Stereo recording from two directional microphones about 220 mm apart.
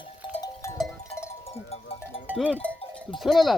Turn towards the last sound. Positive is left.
turn(degrees=0)  # may be behind; listen again after turning